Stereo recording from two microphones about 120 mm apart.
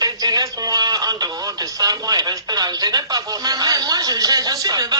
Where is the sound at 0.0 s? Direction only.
35° right (ahead or behind).